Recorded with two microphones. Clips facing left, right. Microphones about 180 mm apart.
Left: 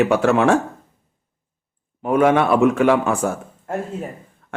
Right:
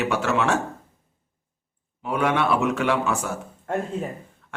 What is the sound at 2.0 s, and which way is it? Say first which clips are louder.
A man's voice: left 7 dB; 45° left (ahead or behind).